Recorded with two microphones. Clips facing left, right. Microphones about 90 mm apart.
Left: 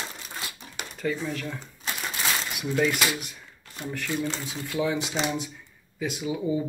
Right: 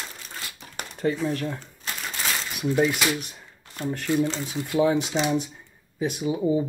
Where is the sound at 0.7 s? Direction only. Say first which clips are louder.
Right 4 dB; 45° right (ahead or behind).